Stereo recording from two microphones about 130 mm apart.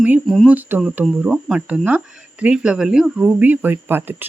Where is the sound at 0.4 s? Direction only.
10° right (ahead or behind).